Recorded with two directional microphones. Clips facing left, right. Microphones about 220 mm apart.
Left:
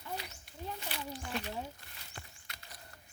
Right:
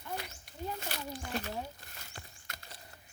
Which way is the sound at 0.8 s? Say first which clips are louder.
Right 1 dB; 45° right (ahead or behind).